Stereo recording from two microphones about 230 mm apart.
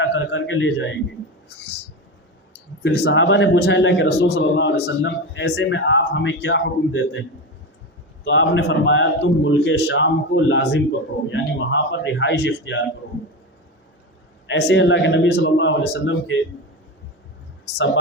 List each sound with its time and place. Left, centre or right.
0.0 s a man's voice: left
2.8 s a man's voice: left
8.2 s a man's voice: left
14.4 s a man's voice: left
17.7 s speech: left